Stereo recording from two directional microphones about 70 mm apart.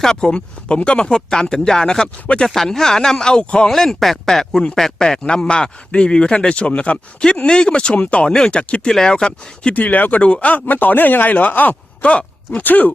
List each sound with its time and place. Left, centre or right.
0.0 s speech: centre
9.7 s speech: left